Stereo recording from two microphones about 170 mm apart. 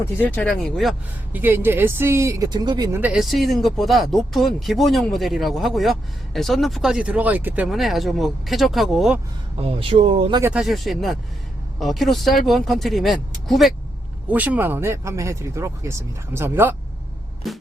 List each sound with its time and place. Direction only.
0.0 s speech: 10° left (ahead or behind)
1.3 s speech: 10° right (ahead or behind)
3.0 s speech: 5° right (ahead or behind)
9.6 s speech: 35° right (ahead or behind)
10.4 s speech: 5° right (ahead or behind)
17.5 s speech: centre (ahead or behind)